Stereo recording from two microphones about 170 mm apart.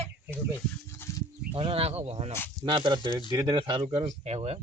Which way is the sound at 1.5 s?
35° right (ahead or behind).